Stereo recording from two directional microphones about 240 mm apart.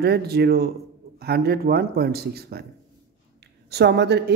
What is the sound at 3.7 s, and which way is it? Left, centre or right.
Speech, right.